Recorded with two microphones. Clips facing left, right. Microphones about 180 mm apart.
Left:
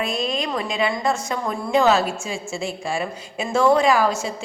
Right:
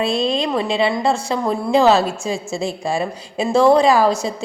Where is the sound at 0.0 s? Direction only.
30° right (ahead or behind).